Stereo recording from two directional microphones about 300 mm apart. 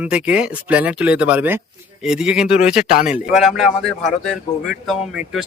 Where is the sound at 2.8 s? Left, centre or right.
Left.